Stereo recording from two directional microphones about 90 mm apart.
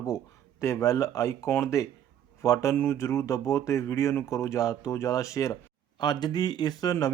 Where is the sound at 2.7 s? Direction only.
25° left (ahead or behind).